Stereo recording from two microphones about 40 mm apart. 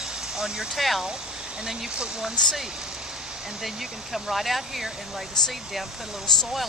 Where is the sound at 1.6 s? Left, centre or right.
Centre.